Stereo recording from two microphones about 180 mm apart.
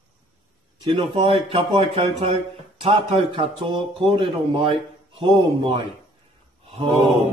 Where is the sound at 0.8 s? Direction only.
30° right (ahead or behind).